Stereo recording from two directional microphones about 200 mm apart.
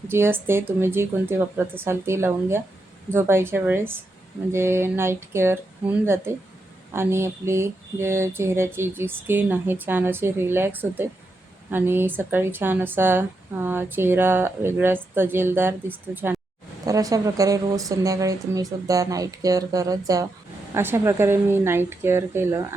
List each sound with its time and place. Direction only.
0.1 s a woman's voice: 10° right (ahead or behind)